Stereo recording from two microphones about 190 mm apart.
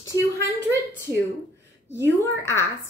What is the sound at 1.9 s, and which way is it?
Speech, 15° left (ahead or behind).